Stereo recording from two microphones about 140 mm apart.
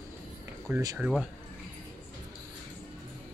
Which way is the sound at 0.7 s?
15° right (ahead or behind).